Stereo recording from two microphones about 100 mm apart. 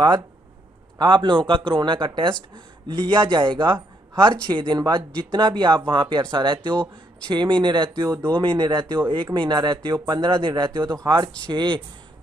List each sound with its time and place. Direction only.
0.9 s speech: 50° right (ahead or behind)
8.1 s speech: 20° right (ahead or behind)
8.4 s speech: 55° right (ahead or behind)